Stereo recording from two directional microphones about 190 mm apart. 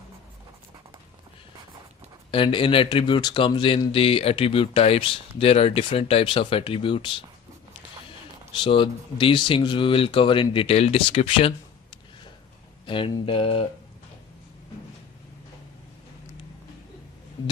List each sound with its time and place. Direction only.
2.3 s speech: 25° left (ahead or behind)
8.6 s speech: 25° left (ahead or behind)
12.8 s speech: 25° left (ahead or behind)